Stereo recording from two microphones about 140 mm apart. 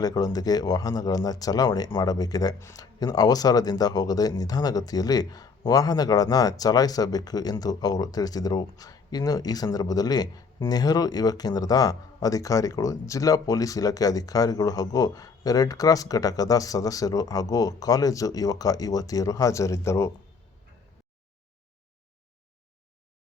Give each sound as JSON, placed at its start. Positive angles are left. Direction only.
{"t": 0.0, "sound": "speech", "side_deg": 25}